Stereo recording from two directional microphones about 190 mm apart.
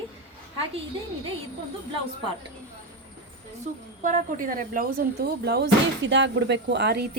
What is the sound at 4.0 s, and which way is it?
Speech, 45° right (ahead or behind).